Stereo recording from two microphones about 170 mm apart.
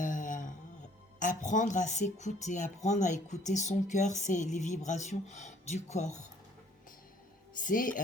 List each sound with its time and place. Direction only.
0.0 s a sound: 50° left (ahead or behind)
1.2 s speech: 50° left (ahead or behind)
7.6 s speech: 50° left (ahead or behind)